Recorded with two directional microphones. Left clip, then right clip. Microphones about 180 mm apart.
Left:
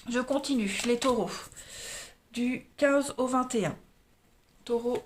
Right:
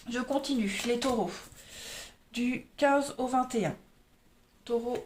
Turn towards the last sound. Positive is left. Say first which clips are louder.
# left 2 dB
turn(degrees=30)  # may be behind; listen again after turning